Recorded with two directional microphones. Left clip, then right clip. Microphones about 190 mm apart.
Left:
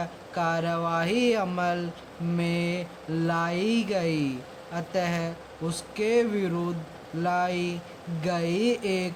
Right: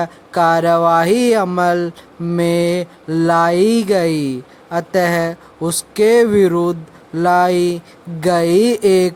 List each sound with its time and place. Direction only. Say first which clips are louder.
0.0 s mantra: right 14 dB; 50° right (ahead or behind)